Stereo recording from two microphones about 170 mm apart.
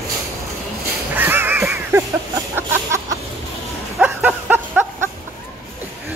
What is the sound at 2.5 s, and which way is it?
Chicken, 15° right (ahead or behind).